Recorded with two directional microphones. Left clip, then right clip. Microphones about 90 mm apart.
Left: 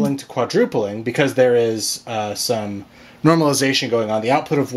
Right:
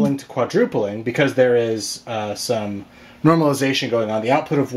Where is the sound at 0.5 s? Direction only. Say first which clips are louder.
Left 1 dB; 30° left (ahead or behind).